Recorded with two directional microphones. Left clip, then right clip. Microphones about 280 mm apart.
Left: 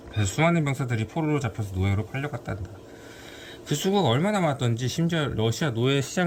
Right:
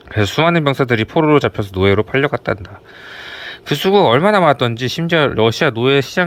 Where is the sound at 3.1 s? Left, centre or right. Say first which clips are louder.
Right 16 dB; centre.